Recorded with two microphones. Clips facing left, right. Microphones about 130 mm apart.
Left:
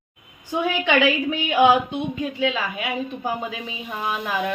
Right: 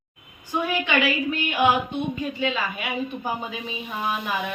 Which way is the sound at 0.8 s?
90° left.